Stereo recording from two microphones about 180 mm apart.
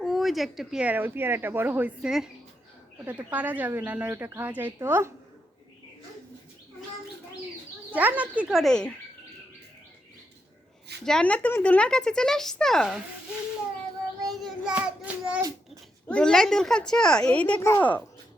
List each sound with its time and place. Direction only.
0.0 s speech: centre (ahead or behind)
7.9 s speech: 10° right (ahead or behind)
11.0 s speech: 5° left (ahead or behind)
14.3 s child singing: centre (ahead or behind)
15.4 s a sound: 20° right (ahead or behind)
16.0 s speech: 5° left (ahead or behind)